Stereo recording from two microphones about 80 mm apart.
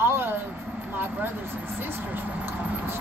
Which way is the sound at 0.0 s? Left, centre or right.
Right.